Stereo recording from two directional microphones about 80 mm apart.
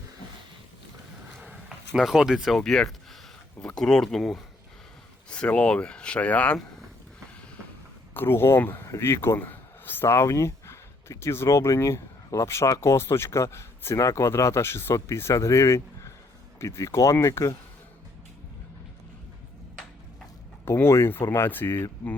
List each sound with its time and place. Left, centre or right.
2.0 s speech: centre
8.1 s speech: left
8.8 s speech: left
20.7 s speech: left